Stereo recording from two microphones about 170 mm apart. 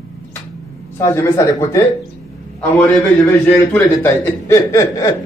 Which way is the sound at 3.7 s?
10° left (ahead or behind).